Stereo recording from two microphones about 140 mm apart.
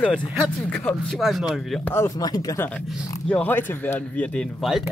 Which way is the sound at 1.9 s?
20° left (ahead or behind).